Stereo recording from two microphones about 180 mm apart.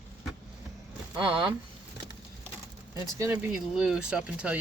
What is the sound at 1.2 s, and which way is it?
Speech, 30° right (ahead or behind).